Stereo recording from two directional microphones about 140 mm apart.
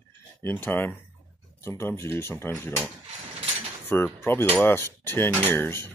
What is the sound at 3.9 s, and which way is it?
Speech, 15° left (ahead or behind).